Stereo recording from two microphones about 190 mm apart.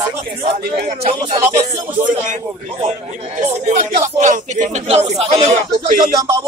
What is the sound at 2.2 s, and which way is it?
Speech, 40° right (ahead or behind).